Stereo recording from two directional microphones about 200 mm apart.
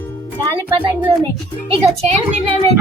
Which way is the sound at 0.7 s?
25° right (ahead or behind).